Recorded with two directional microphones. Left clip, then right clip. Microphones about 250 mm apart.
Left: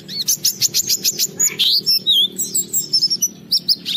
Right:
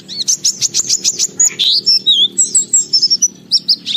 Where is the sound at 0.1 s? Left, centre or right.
Centre.